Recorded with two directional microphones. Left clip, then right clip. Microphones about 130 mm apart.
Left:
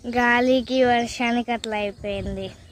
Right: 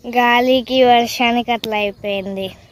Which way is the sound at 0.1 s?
20° right (ahead or behind).